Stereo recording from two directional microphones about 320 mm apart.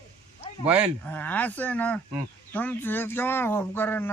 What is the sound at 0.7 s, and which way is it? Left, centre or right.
Speech, centre.